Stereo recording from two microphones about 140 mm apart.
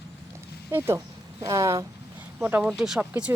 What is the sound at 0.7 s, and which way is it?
Speech, 15° right (ahead or behind).